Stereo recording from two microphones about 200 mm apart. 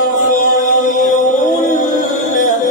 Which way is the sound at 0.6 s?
40° left (ahead or behind).